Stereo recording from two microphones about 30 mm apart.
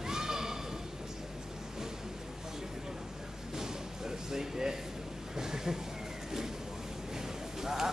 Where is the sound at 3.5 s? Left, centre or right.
Centre.